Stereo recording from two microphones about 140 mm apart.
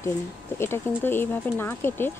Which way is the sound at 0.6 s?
15° left (ahead or behind).